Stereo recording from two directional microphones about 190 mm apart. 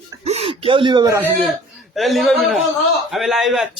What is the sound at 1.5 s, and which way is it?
A man's voice, centre (ahead or behind).